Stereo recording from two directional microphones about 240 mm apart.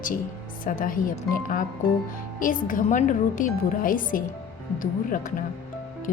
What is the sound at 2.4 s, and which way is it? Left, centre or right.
Speech, left.